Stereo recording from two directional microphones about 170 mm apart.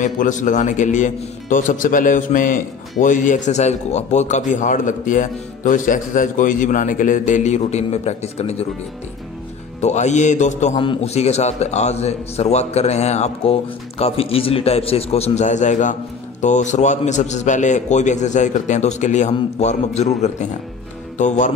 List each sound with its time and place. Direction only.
0.0 s speech: 50° left (ahead or behind)
9.8 s speech: 40° left (ahead or behind)
10.8 s a man's voice: 35° left (ahead or behind)